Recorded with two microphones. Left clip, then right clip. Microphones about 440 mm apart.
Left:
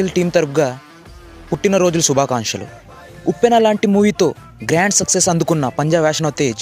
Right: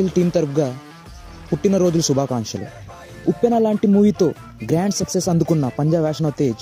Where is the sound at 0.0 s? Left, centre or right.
Centre.